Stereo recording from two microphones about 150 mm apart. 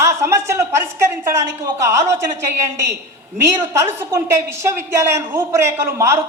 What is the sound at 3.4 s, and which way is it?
A woman's voice, 20° right (ahead or behind).